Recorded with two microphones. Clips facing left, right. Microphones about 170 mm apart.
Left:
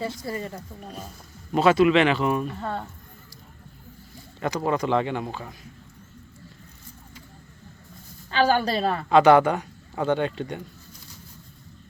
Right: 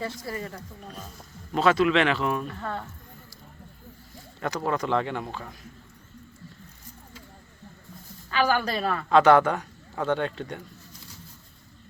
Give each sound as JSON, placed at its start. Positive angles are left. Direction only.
{"t": 0.0, "sound": "a woman's voice", "side_deg": 20}
{"t": 1.5, "sound": "speech", "side_deg": 5}
{"t": 2.5, "sound": "a woman's voice", "side_deg": 20}
{"t": 4.4, "sound": "speech", "side_deg": 0}
{"t": 8.3, "sound": "a woman's voice", "side_deg": 25}
{"t": 9.0, "sound": "speech", "side_deg": 5}